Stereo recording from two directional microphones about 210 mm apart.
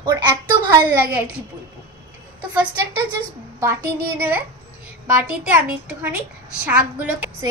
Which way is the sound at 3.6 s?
10° right (ahead or behind).